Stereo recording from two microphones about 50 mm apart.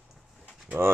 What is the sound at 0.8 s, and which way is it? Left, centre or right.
Mechanisms, right.